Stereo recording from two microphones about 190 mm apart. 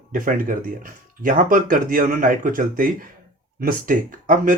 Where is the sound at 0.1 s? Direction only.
45° right (ahead or behind).